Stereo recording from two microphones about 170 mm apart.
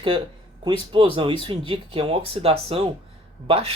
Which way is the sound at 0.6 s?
30° right (ahead or behind).